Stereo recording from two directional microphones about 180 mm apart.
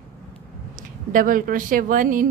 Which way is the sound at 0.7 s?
50° right (ahead or behind).